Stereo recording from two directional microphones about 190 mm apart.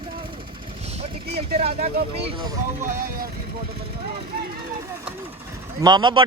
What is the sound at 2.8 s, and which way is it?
Speech, 50° right (ahead or behind).